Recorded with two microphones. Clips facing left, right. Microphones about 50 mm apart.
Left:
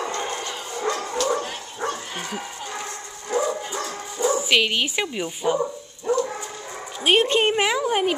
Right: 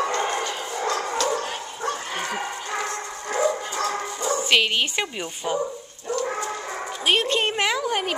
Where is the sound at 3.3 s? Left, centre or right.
Right.